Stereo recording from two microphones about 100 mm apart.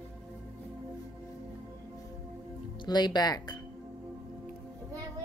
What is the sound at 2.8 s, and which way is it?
Speech, 45° left (ahead or behind).